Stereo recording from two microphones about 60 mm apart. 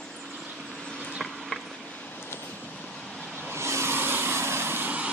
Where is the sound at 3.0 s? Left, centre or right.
Centre.